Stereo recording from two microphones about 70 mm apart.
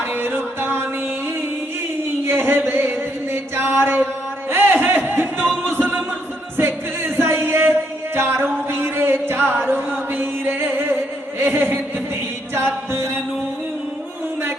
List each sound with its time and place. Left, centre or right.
0.0 s music: right
2.2 s a sound: right
5.6 s music: right